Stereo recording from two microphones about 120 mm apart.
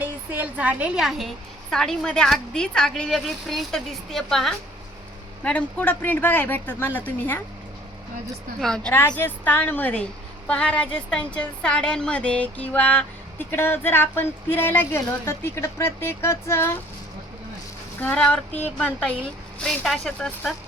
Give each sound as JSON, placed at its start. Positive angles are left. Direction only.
{"t": 0.0, "sound": "a woman's voice", "side_deg": -15}
{"t": 8.6, "sound": "a woman's voice", "side_deg": 5}
{"t": 9.1, "sound": "a woman's voice", "side_deg": 15}
{"t": 18.0, "sound": "a woman's voice", "side_deg": 10}